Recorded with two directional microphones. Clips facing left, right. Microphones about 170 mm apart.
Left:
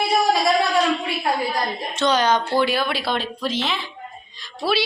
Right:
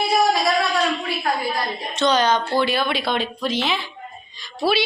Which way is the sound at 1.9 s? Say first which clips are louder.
Right 1 dB; 10° left (ahead or behind).